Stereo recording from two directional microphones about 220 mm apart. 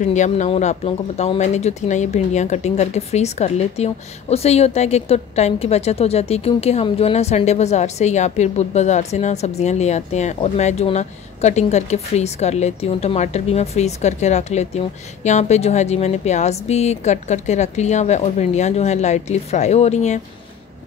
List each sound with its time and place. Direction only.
0.0 s speech: 35° left (ahead or behind)